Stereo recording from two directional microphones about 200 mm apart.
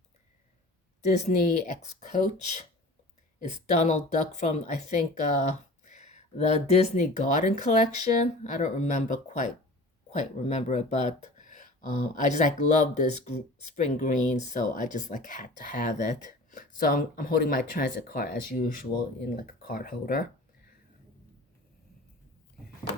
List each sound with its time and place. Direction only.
1.0 s speech: 35° left (ahead or behind)